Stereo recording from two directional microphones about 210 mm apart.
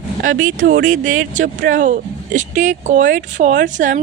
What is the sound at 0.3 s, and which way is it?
Speech, 70° right (ahead or behind).